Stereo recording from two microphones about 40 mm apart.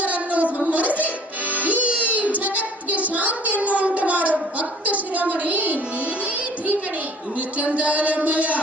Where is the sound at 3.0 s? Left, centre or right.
Right.